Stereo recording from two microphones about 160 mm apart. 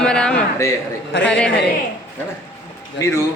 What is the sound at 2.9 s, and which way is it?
Speech, 15° left (ahead or behind).